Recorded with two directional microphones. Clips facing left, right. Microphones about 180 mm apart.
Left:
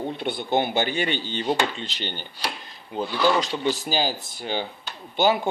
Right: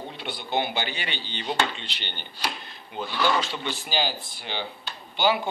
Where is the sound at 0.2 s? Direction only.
50° left (ahead or behind).